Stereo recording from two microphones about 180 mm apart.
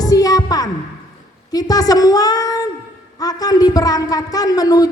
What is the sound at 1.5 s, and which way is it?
A woman's voice, 20° left (ahead or behind).